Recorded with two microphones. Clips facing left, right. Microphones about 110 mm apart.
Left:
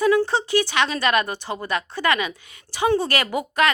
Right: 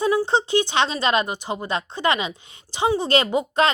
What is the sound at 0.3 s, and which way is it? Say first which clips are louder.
A woman's voice: right 1 dB; 20° right (ahead or behind).